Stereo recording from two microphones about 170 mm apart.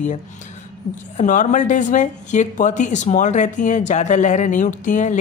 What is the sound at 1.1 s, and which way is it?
Speech, 50° left (ahead or behind).